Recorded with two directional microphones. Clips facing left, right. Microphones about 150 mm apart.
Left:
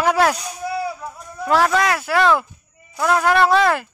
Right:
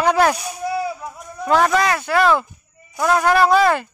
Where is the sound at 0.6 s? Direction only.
20° right (ahead or behind).